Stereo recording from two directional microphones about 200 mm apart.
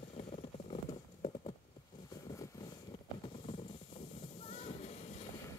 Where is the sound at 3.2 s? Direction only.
30° left (ahead or behind).